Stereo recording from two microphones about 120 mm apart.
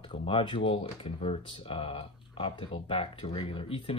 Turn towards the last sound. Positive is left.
turn(degrees=50)  # may be behind; listen again after turning